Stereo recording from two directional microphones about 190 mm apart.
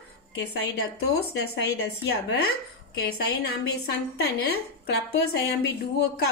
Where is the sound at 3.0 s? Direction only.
55° left (ahead or behind).